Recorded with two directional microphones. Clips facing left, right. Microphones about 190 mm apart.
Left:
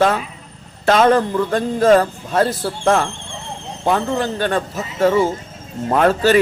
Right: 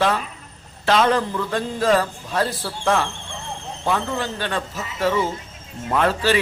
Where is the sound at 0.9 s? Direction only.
50° left (ahead or behind).